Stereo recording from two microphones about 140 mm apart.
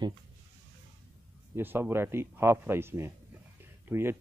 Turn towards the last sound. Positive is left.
turn(degrees=-15)  # may be behind; listen again after turning